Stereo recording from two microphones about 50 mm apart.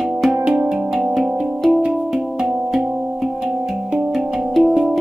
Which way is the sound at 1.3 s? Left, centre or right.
Centre.